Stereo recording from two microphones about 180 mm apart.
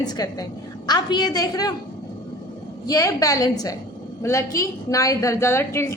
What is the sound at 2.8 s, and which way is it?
A woman's voice, 20° left (ahead or behind).